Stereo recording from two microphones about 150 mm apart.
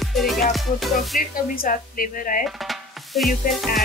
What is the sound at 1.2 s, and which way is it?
Speech, 70° left (ahead or behind).